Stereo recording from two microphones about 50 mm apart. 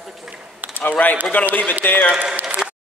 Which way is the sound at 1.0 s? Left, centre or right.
Left.